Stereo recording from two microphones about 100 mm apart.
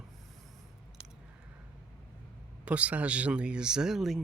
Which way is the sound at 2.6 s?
15° right (ahead or behind).